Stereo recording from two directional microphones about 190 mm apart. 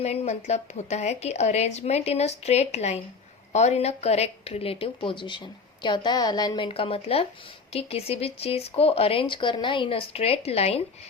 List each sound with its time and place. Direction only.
0.0 s a woman's voice: 35° left (ahead or behind)